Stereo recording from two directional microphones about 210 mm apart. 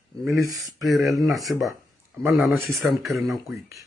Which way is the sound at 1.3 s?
15° right (ahead or behind).